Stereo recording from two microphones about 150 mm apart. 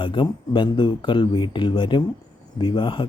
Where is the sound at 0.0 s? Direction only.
30° left (ahead or behind).